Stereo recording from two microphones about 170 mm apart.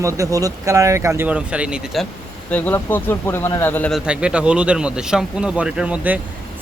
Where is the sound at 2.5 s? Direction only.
10° left (ahead or behind).